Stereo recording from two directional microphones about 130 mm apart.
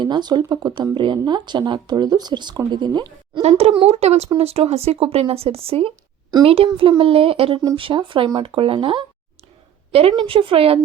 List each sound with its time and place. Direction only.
0.0 s speech: 35° right (ahead or behind)
3.4 s speech: 50° right (ahead or behind)